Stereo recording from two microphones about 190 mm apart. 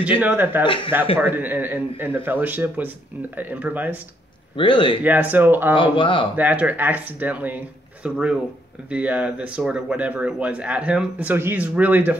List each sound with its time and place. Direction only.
0.2 s speech: 10° right (ahead or behind)
0.7 s speech: 25° left (ahead or behind)
1.2 s speech: 10° right (ahead or behind)
4.6 s speech: 25° left (ahead or behind)
5.0 s speech: 10° right (ahead or behind)
5.8 s speech: 25° left (ahead or behind)
6.3 s speech: 10° right (ahead or behind)